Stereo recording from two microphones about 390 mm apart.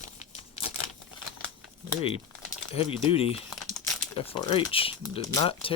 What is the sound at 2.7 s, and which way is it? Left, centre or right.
Speech, centre.